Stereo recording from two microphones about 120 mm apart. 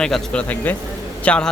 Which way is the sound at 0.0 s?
5° left (ahead or behind).